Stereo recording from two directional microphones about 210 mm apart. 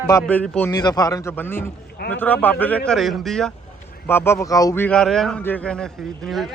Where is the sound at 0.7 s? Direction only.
20° left (ahead or behind).